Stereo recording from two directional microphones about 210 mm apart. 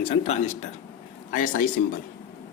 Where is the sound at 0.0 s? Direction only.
30° left (ahead or behind).